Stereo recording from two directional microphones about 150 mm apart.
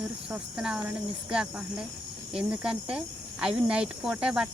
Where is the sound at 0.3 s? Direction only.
5° right (ahead or behind).